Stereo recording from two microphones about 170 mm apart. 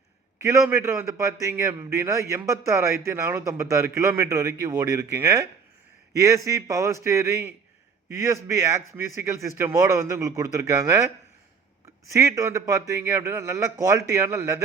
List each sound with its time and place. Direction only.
0.7 s a man's voice: 15° right (ahead or behind)
12.1 s a man's voice: 20° right (ahead or behind)